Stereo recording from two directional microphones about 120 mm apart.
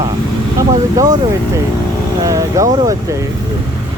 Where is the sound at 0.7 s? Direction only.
30° right (ahead or behind).